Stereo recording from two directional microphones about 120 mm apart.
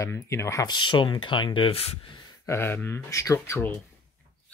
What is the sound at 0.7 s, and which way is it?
Speech, 40° left (ahead or behind).